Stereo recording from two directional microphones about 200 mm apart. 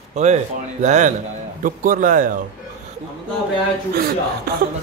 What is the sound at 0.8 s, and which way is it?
A man's voice, 35° right (ahead or behind).